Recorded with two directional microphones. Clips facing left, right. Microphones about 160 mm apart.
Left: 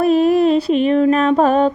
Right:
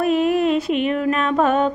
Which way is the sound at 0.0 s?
35° left (ahead or behind).